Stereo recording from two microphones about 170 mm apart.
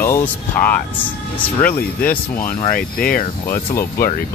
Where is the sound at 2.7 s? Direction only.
60° left (ahead or behind).